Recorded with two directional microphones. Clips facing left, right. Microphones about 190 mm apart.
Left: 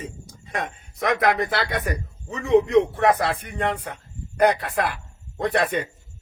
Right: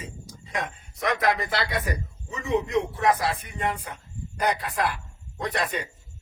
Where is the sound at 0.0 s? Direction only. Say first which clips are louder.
Left 4 dB; 55° left (ahead or behind).